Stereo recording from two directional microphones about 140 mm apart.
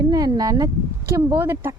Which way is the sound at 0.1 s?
25° right (ahead or behind).